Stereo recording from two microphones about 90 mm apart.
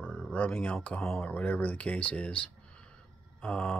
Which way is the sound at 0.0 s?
15° left (ahead or behind).